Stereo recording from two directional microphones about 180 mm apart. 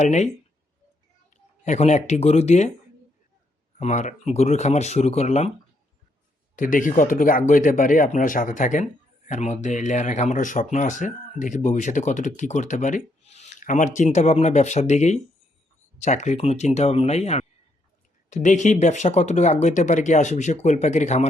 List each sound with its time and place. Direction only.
0.0 s speech: 40° left (ahead or behind)
1.6 s speech: 40° left (ahead or behind)
3.8 s speech: 40° left (ahead or behind)
6.6 s speech: 45° left (ahead or behind)